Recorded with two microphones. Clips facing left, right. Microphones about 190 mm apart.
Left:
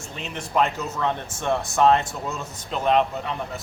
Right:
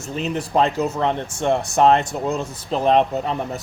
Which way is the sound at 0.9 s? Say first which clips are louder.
Right 4 dB; 20° right (ahead or behind).